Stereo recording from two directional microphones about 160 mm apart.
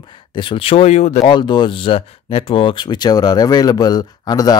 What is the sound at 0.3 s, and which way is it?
Speech, 30° left (ahead or behind).